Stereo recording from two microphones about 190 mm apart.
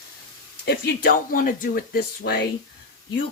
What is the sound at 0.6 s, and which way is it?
Speech, 55° left (ahead or behind).